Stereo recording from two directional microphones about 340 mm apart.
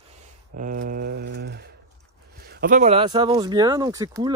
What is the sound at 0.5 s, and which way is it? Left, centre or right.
Mantra, right.